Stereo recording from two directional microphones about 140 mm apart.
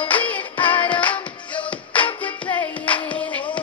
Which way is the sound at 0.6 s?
35° left (ahead or behind).